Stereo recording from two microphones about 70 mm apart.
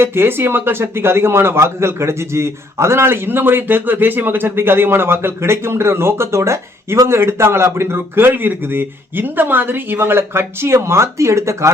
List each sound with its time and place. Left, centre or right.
0.0 s a man's voice: right